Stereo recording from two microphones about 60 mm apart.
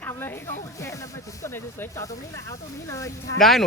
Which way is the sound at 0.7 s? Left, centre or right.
Left.